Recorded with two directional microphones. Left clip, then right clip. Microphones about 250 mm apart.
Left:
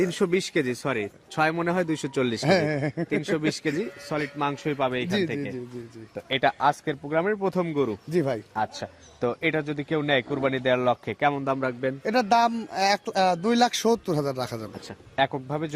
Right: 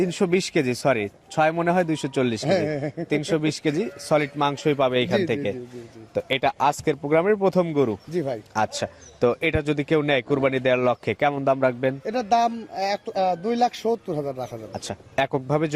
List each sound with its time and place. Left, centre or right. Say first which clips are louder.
0.0 s speech: right 2 dB; centre
2.5 s a man's voice: even; left
3.1 s a man's voice: right 4 dB; centre
6.2 s speech: even; centre
8.1 s a man's voice: left 1 dB; left
8.5 s a man's voice: right 5 dB; centre
12.0 s a man's voice: left 1 dB; left
14.8 s a man's voice: right 1 dB; centre